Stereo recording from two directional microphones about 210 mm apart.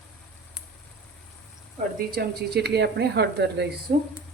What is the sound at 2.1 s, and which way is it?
A woman's voice, 50° right (ahead or behind).